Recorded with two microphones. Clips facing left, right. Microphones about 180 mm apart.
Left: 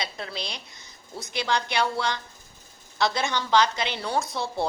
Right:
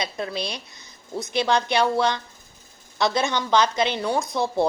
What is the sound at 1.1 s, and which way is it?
A woman's voice, 20° right (ahead or behind).